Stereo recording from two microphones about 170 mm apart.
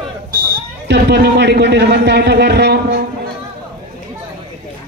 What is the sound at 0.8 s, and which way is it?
A man's voice, 80° right.